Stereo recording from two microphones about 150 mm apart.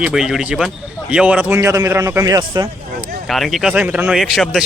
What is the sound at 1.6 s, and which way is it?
Speech, 20° right (ahead or behind).